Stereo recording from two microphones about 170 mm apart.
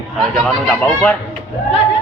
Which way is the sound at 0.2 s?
Centre (ahead or behind).